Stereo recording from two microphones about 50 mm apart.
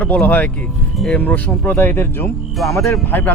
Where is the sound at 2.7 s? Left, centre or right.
Left.